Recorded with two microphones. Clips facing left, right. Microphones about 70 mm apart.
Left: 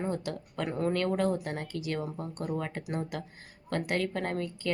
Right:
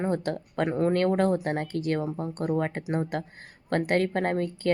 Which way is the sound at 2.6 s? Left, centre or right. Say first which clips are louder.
Right 7 dB; right.